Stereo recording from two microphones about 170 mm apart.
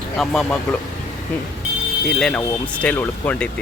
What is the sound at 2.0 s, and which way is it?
Speech, 5° left (ahead or behind).